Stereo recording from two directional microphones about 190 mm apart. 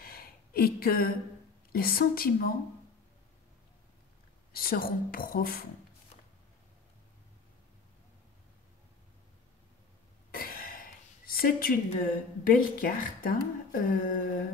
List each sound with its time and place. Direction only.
0.0 s a sound: 50° left (ahead or behind)
1.7 s a woman's voice: 50° left (ahead or behind)
4.5 s a woman's voice: 50° left (ahead or behind)
10.3 s speech: 50° left (ahead or behind)